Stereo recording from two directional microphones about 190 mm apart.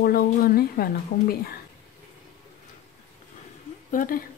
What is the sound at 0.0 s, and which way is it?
Speech, 55° left (ahead or behind).